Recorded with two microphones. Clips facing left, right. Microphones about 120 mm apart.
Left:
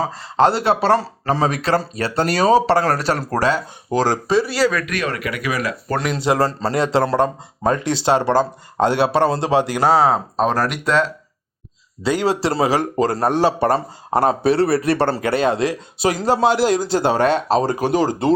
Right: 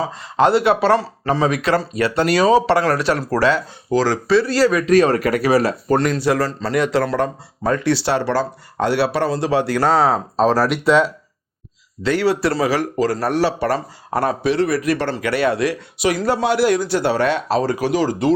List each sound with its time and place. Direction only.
0.0 s speech: 35° left (ahead or behind)
4.3 s speech: 15° left (ahead or behind)
4.9 s speech: 35° right (ahead or behind)
6.1 s speech: 25° left (ahead or behind)
10.0 s speech: centre (ahead or behind)
12.0 s speech: 20° left (ahead or behind)
17.2 s speech: 40° left (ahead or behind)